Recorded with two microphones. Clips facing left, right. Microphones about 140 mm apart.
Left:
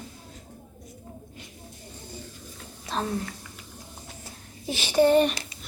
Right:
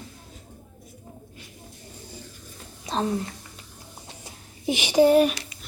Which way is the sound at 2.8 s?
20° right (ahead or behind).